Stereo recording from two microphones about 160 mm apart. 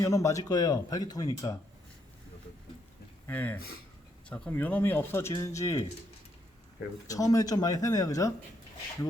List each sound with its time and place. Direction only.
0.0 s speech: 20° left (ahead or behind)
3.2 s speech: 10° left (ahead or behind)
7.1 s speech: 20° left (ahead or behind)